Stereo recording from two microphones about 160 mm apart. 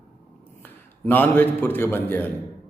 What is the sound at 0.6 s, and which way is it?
A man's voice, 15° left (ahead or behind).